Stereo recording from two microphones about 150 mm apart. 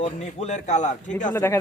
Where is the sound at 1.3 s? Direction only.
20° left (ahead or behind).